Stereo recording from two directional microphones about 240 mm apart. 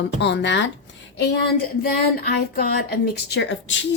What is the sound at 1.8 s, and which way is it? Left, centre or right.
A woman's voice, left.